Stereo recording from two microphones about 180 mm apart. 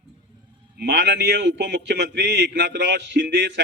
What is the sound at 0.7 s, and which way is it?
Speech, 65° right (ahead or behind).